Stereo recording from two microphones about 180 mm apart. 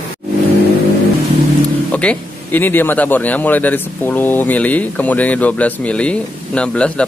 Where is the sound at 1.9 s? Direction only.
5° left (ahead or behind).